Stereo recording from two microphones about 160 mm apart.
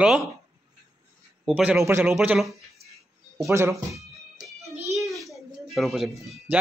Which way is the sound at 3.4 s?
20° right (ahead or behind).